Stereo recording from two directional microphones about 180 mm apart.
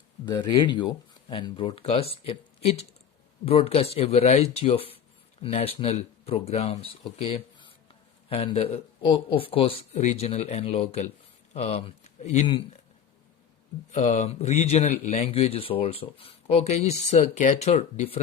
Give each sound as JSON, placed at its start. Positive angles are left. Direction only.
{"t": 0.3, "sound": "a man's voice", "side_deg": 25}
{"t": 13.9, "sound": "a man's voice", "side_deg": 40}